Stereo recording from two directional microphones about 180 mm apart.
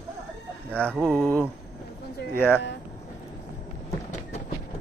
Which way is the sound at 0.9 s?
Centre (ahead or behind).